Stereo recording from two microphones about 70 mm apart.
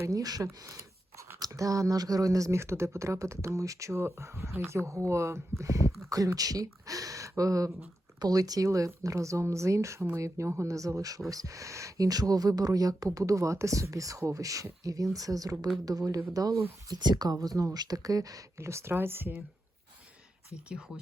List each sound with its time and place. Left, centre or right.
0.2 s speech: right
1.5 s speech: right
3.9 s speech: right
12.0 s speech: right
16.9 s speech: right
17.3 s speech: right
18.6 s speech: right
20.7 s speech: centre